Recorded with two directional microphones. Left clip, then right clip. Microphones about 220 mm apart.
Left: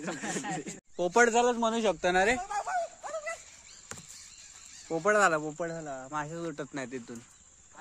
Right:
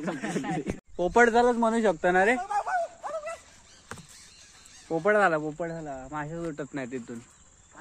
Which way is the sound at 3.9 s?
15° left (ahead or behind).